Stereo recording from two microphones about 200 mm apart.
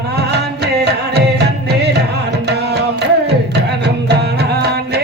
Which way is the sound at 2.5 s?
55° right (ahead or behind).